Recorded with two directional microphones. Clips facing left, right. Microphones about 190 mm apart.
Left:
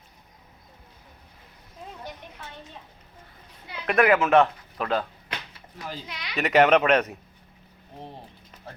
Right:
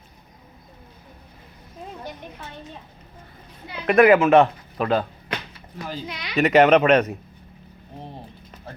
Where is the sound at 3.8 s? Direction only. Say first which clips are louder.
Right 6 dB; 5° right (ahead or behind).